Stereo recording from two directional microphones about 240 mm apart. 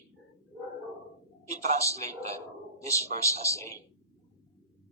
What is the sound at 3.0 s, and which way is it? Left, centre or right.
Speech, right.